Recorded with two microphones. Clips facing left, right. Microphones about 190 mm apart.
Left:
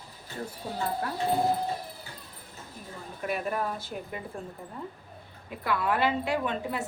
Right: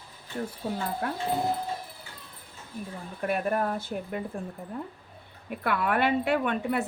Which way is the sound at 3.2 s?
55° right (ahead or behind).